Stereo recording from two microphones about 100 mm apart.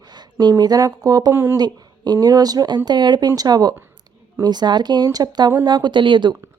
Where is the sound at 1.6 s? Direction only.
45° right (ahead or behind).